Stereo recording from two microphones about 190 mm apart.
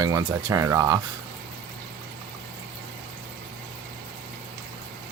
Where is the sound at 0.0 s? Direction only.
20° right (ahead or behind).